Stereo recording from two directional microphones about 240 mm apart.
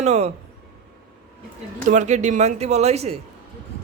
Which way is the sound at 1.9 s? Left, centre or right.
Right.